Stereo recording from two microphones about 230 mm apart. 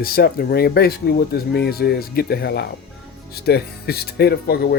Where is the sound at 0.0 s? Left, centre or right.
Left.